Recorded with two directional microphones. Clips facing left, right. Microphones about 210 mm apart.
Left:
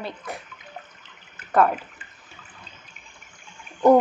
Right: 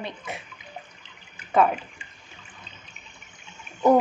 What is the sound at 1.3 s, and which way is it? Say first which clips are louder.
Water: left 1 dB; centre (ahead or behind).